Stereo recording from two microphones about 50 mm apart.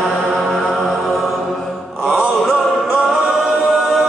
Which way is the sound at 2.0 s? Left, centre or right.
Right.